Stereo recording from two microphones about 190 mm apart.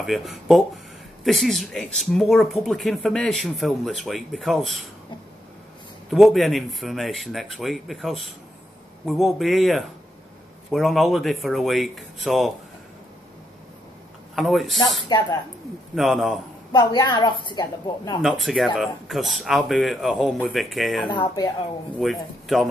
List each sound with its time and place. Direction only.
0.0 s speech: centre (ahead or behind)
6.0 s speech: centre (ahead or behind)
14.3 s speech: centre (ahead or behind)
15.0 s a woman's voice: 20° left (ahead or behind)
15.9 s speech: centre (ahead or behind)
16.7 s a woman's voice: 20° left (ahead or behind)
18.2 s speech: centre (ahead or behind)
21.1 s a woman's voice: 20° left (ahead or behind)
21.9 s speech: centre (ahead or behind)